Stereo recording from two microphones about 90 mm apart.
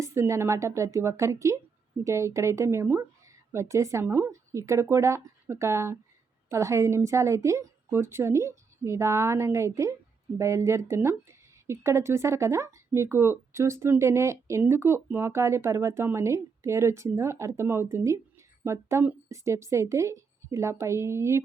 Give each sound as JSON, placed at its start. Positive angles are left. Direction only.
{"t": 0.0, "sound": "speech", "side_deg": -30}
{"t": 4.0, "sound": "a woman's voice", "side_deg": -25}
{"t": 4.3, "sound": "speech", "side_deg": -35}